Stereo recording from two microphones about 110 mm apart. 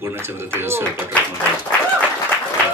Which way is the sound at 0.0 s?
20° right (ahead or behind).